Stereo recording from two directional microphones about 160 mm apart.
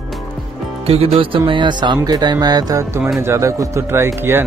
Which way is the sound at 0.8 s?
35° right (ahead or behind).